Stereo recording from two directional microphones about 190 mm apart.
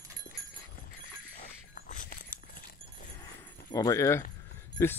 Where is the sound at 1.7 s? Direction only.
45° left (ahead or behind).